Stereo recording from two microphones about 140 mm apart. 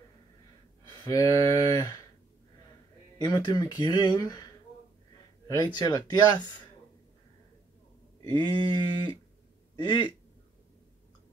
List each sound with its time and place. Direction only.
1.0 s speech: 25° left (ahead or behind)
3.2 s speech: 25° left (ahead or behind)
5.8 s speech: 30° left (ahead or behind)
8.3 s speech: 30° left (ahead or behind)